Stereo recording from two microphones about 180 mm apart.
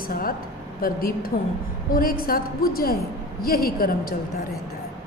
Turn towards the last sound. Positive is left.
turn(degrees=55)  # may be behind; listen again after turning